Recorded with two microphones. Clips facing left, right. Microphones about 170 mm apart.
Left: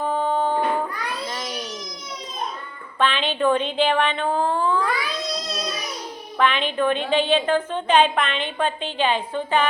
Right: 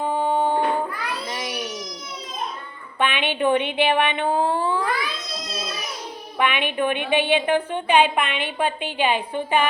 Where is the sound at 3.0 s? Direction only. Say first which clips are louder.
Left 1 dB; 15° right (ahead or behind).